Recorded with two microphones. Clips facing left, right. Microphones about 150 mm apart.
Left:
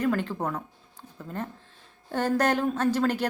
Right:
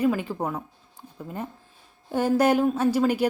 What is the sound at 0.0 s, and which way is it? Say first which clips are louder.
A woman's voice: right 2 dB; 10° right (ahead or behind).